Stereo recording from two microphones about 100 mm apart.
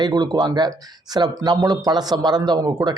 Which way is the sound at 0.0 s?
45° right (ahead or behind).